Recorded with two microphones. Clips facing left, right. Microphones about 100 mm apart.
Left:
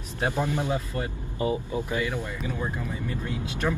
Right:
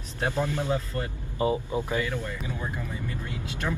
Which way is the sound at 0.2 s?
15° left (ahead or behind).